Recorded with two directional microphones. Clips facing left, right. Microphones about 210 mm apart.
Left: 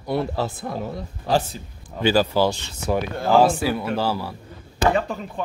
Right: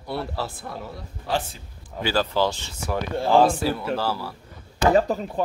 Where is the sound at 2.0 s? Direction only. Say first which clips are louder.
Left 4 dB; 10° left (ahead or behind).